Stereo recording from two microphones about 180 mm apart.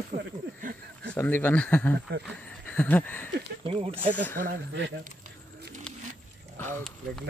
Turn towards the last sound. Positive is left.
turn(degrees=10)  # may be behind; listen again after turning